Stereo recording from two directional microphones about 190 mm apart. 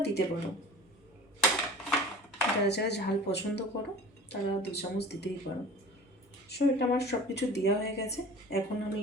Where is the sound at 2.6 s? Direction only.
60° left (ahead or behind).